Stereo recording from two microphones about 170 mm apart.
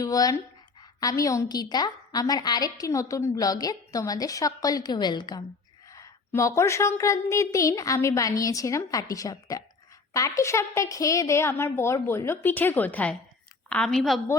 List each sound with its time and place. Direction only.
0.0 s a woman's voice: 20° left (ahead or behind); by 14.2 s centre (ahead or behind)